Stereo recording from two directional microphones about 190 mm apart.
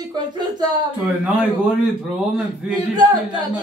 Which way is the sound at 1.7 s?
5° right (ahead or behind).